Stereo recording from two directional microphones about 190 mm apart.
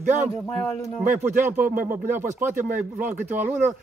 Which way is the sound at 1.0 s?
10° right (ahead or behind).